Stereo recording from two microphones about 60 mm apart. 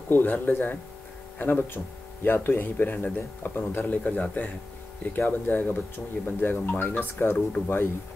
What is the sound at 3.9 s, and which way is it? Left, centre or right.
Speech, left.